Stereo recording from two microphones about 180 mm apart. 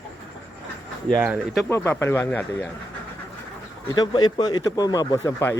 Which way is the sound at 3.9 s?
25° left (ahead or behind).